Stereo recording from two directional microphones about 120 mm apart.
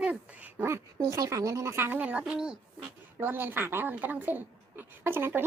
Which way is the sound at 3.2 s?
15° right (ahead or behind).